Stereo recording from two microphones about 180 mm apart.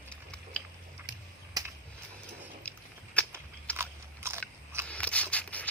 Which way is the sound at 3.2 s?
5° left (ahead or behind).